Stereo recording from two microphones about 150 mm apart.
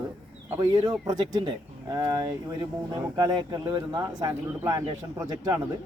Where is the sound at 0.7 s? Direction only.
25° right (ahead or behind).